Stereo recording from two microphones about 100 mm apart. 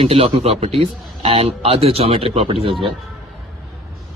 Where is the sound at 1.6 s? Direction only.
80° right.